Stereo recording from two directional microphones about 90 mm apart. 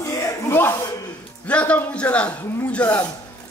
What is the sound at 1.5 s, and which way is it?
Speech, 15° left (ahead or behind).